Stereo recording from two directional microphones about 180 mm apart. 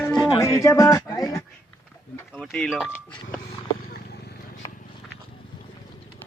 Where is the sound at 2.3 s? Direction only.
5° left (ahead or behind).